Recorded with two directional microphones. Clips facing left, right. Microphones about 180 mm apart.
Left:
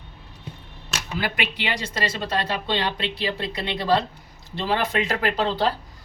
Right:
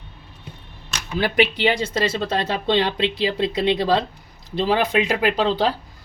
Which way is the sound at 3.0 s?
20° right (ahead or behind).